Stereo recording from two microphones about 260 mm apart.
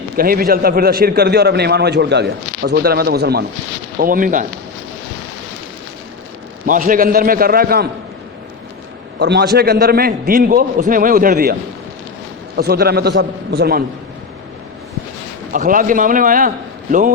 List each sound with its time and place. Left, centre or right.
0.2 s a man's voice: right
6.7 s a man's voice: right
9.1 s a man's voice: right
12.5 s a man's voice: right
15.5 s a man's voice: right